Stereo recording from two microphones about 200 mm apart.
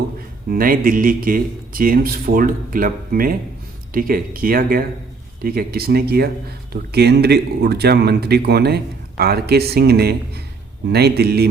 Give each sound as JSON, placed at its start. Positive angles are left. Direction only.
{"t": 0.5, "sound": "speech", "side_deg": -45}